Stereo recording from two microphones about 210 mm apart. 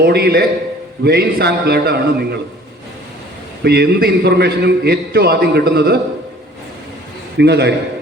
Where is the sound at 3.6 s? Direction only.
50° right (ahead or behind).